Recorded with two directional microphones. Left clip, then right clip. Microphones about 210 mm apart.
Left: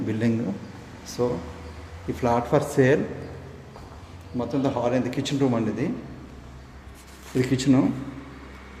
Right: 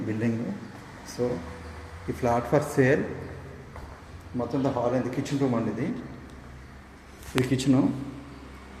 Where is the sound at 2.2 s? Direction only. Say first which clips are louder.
Left 2 dB; 5° left (ahead or behind).